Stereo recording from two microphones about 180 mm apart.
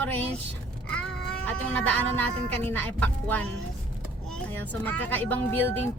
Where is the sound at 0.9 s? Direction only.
5° left (ahead or behind).